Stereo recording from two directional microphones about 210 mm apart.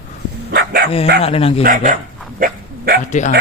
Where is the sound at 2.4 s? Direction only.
45° right (ahead or behind).